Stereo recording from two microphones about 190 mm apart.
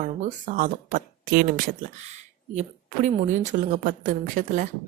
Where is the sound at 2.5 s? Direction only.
35° right (ahead or behind).